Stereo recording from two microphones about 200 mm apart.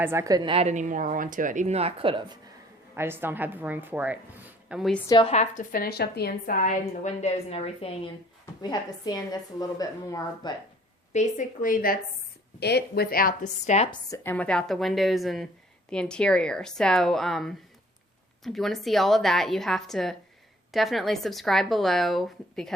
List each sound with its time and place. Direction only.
0.0 s a woman's voice: 10° right (ahead or behind)
2.9 s speech: 10° right (ahead or behind)
5.0 s a woman's voice: 20° left (ahead or behind)
5.3 s a woman's voice: 35° left (ahead or behind); by 10.5 s 20° left (ahead or behind)
11.1 s a woman's voice: 40° left (ahead or behind)
12.5 s a woman's voice: 55° left (ahead or behind); by 14.0 s 30° left (ahead or behind)
14.1 s speech: 10° left (ahead or behind)